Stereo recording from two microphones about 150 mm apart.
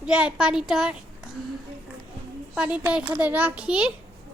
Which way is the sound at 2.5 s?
5° right (ahead or behind).